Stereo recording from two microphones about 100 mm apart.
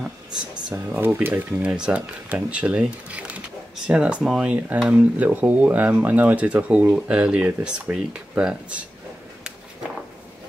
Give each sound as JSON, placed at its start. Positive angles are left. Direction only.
{"t": 0.7, "sound": "speech", "side_deg": -15}